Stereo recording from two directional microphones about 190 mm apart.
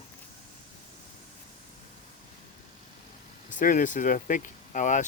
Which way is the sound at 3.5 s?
45° left (ahead or behind).